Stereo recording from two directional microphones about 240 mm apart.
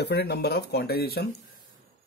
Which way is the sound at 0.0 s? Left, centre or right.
Left.